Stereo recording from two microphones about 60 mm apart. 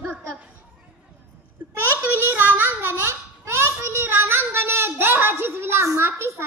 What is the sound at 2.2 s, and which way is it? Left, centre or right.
Speech, right.